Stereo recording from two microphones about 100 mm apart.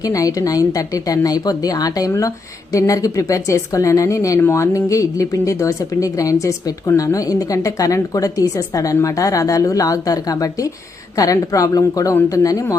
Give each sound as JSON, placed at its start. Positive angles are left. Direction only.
{"t": 0.0, "sound": "speech", "side_deg": 35}